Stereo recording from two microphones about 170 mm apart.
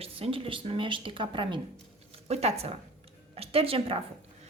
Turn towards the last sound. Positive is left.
turn(degrees=-35)  # may be behind; listen again after turning